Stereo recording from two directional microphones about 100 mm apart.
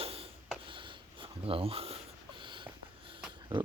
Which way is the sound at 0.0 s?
75° right (ahead or behind).